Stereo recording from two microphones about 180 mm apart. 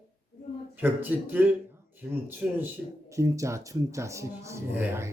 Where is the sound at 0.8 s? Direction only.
10° right (ahead or behind).